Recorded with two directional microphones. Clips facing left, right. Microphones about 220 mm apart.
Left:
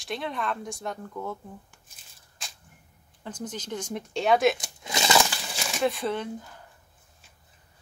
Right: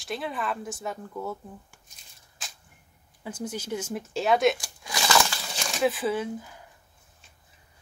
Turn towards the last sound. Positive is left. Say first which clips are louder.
# right 2 dB
turn(degrees=-5)  # may be behind; listen again after turning